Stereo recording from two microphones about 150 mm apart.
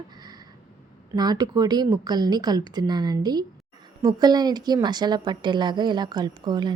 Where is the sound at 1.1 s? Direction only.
25° right (ahead or behind).